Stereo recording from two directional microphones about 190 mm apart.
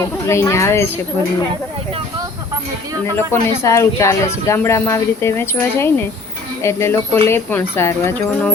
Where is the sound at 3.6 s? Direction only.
15° left (ahead or behind).